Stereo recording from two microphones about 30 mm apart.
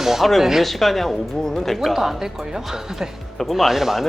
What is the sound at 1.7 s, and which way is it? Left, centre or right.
Speech, centre.